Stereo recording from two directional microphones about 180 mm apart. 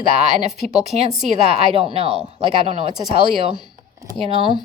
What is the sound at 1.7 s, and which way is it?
A woman's voice, 30° right (ahead or behind).